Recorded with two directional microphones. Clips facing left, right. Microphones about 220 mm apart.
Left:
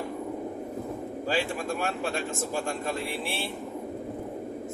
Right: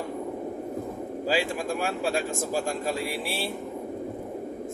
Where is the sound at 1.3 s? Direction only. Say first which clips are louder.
Right 2 dB; 10° right (ahead or behind).